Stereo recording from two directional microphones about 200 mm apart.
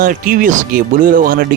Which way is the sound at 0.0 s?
45° right (ahead or behind).